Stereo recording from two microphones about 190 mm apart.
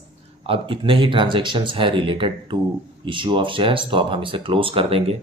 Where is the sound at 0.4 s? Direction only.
30° right (ahead or behind).